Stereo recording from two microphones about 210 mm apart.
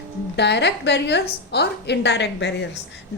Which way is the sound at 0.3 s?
55° left (ahead or behind).